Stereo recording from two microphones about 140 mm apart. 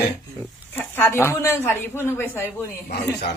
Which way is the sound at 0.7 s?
15° left (ahead or behind).